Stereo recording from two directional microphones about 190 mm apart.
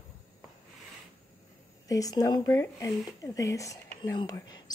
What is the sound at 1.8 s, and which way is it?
Speech, 20° left (ahead or behind).